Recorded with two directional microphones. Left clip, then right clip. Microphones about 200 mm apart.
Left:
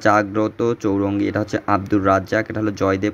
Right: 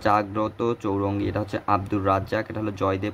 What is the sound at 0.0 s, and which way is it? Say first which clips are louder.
Speech: left 5 dB; 10° left (ahead or behind).